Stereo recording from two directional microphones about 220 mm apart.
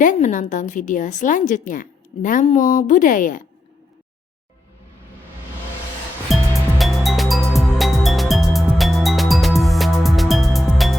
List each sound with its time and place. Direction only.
0.0 s a woman's voice: 35° left (ahead or behind)
6.3 s music: centre (ahead or behind)